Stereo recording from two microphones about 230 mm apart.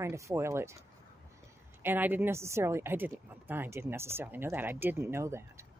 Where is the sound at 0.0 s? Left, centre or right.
Centre.